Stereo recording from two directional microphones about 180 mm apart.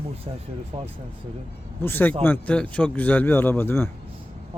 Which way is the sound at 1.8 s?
10° left (ahead or behind).